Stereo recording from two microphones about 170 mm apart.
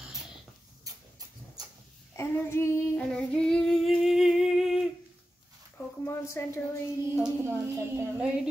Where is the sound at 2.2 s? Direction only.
15° left (ahead or behind); by 4.9 s 5° right (ahead or behind).